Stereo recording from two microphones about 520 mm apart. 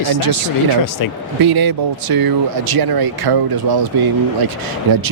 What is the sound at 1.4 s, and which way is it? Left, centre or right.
Speech, right.